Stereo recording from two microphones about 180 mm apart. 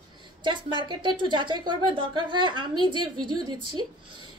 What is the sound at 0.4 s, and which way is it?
A woman's voice, 25° right (ahead or behind).